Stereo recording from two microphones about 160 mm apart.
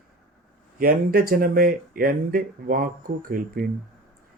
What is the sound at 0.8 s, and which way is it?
Speech, 65° right (ahead or behind).